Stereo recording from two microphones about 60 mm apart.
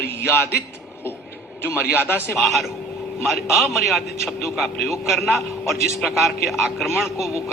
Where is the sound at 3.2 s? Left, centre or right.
Centre.